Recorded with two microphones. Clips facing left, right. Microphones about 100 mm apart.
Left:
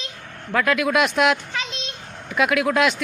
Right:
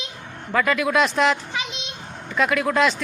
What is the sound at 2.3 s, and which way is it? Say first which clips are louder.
Speech: left 1 dB; 5° left (ahead or behind).